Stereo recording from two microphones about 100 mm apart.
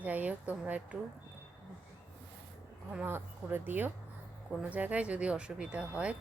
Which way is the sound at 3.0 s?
20° right (ahead or behind).